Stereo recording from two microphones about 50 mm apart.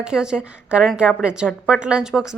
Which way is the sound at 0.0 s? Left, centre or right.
Centre.